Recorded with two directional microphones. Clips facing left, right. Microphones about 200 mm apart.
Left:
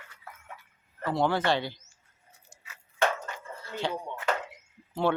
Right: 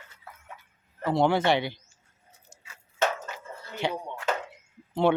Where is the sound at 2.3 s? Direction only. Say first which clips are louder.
Right 1 dB; 20° right (ahead or behind).